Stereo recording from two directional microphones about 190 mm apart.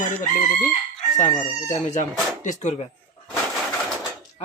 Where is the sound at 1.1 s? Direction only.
40° left (ahead or behind).